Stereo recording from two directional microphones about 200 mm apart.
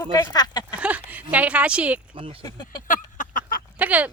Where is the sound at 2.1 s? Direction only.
25° right (ahead or behind).